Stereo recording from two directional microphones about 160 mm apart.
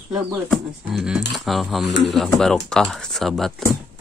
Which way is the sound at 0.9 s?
5° right (ahead or behind).